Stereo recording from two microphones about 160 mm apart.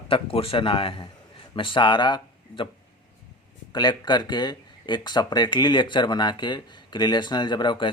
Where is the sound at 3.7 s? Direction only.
25° left (ahead or behind).